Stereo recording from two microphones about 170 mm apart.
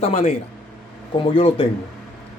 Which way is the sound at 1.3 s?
35° left (ahead or behind).